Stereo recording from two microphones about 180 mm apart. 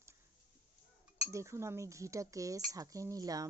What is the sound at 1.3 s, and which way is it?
Speech, 15° right (ahead or behind).